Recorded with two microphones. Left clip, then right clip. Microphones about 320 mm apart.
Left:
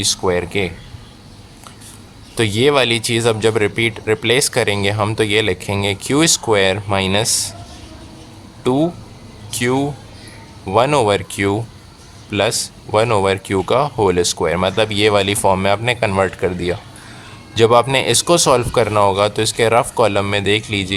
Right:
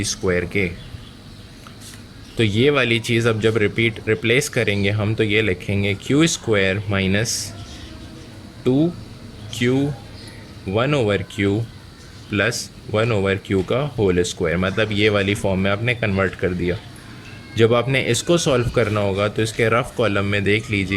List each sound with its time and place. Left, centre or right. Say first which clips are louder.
0.0 s speech: left 4 dB; centre
2.3 s speech: left 3 dB; centre
9.5 s speech: left 2 dB; centre
10.8 s speech: left 6 dB; centre
15.4 s speech: left 8 dB; left
15.6 s speech: left 5 dB; centre